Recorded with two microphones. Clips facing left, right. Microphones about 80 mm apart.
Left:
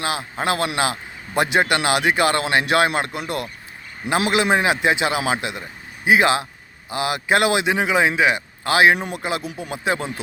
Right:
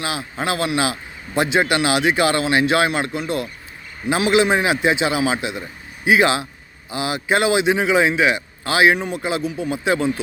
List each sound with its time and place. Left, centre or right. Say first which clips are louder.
0.0 s a man's voice: left 1 dB; left
4.1 s a man's voice: right 2 dB; left